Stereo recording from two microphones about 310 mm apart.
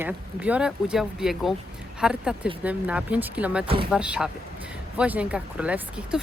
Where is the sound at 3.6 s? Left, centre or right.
Centre.